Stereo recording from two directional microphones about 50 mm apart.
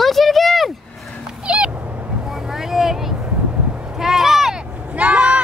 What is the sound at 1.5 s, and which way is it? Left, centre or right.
Cat, right.